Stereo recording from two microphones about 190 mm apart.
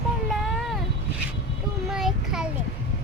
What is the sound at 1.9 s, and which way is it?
Child singing, 5° right (ahead or behind).